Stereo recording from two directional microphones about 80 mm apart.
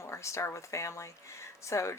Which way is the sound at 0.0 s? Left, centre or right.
Left.